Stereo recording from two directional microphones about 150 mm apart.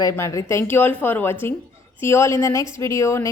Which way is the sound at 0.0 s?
20° left (ahead or behind).